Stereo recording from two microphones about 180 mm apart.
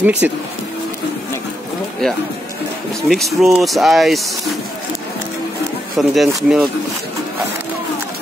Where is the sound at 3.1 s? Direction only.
Centre (ahead or behind).